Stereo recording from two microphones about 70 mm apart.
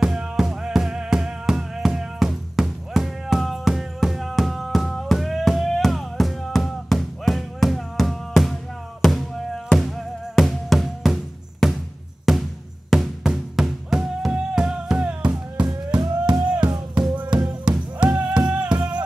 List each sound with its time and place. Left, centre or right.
0.0 s music: centre
16.0 s a sound: right
16.4 s music: centre